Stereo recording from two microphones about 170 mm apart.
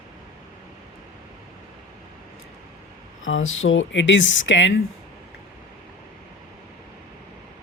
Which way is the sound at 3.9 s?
90° left.